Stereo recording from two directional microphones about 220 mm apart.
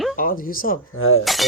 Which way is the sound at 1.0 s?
65° left (ahead or behind).